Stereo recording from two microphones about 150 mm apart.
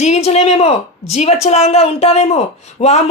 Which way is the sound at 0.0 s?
45° left (ahead or behind).